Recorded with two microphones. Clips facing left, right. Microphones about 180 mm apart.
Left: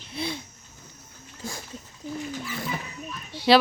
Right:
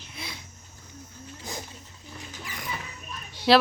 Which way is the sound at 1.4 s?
20° right (ahead or behind).